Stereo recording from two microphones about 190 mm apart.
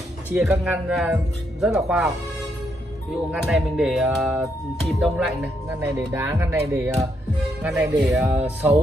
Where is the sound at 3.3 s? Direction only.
Centre (ahead or behind).